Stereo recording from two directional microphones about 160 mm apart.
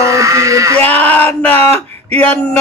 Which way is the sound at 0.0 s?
20° right (ahead or behind).